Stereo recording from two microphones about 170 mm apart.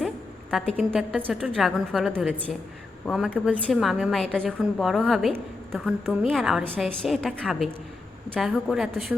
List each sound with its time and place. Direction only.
0.5 s a woman's voice: centre (ahead or behind)